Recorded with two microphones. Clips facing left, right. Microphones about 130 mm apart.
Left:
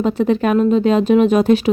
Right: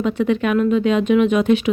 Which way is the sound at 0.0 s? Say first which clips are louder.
Left 3 dB; 35° left (ahead or behind).